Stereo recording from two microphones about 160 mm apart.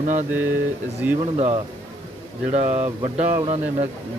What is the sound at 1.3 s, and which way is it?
A man's voice, 40° right (ahead or behind).